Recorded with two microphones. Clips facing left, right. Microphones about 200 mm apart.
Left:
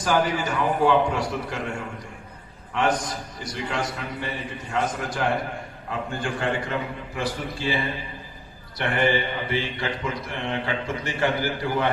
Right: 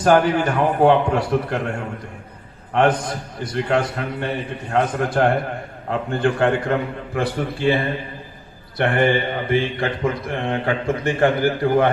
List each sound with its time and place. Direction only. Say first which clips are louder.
0.0 s a man's voice: right 7 dB; 60° right (ahead or behind)
2.7 s a man's voice: right 6 dB; 60° right (ahead or behind)